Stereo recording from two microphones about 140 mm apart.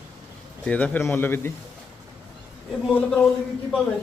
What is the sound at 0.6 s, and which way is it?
Speech, 10° left (ahead or behind).